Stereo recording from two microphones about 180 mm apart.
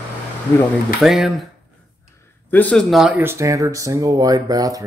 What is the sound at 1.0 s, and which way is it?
Speech, centre (ahead or behind).